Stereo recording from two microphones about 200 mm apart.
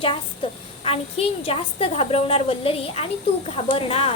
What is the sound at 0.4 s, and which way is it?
A woman's voice, 25° left (ahead or behind).